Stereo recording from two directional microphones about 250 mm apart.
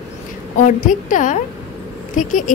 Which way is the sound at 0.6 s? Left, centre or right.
Left.